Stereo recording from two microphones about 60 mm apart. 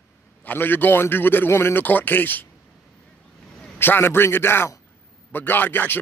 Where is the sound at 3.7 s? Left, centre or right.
Left.